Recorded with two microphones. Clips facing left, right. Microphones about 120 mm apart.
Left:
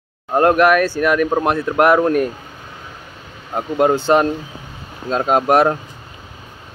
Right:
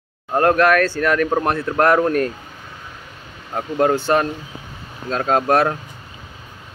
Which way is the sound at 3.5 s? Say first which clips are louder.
Left 2 dB; 15° left (ahead or behind).